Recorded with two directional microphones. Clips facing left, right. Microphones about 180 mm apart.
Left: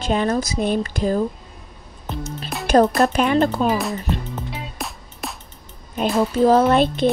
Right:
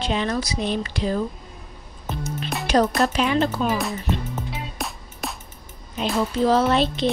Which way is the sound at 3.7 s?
Centre (ahead or behind).